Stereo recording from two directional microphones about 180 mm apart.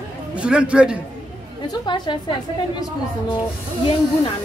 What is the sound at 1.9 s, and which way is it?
Speech, 25° left (ahead or behind).